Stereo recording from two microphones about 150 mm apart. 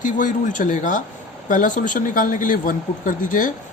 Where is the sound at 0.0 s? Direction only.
60° left (ahead or behind).